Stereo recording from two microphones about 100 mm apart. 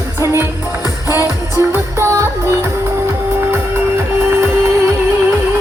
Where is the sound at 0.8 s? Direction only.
35° left (ahead or behind).